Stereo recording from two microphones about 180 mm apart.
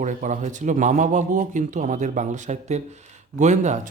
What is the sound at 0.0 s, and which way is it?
Speech, 45° right (ahead or behind).